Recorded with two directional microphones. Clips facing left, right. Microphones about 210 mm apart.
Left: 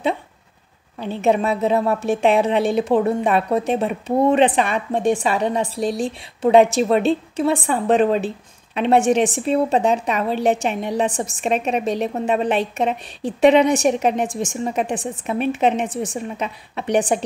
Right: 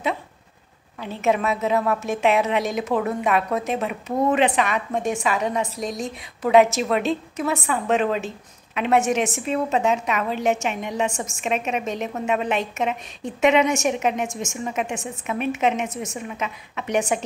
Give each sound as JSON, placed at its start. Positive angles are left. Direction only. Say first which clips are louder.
{"t": 0.9, "sound": "a woman's voice", "louder": "left 4 dB", "side_deg": 30}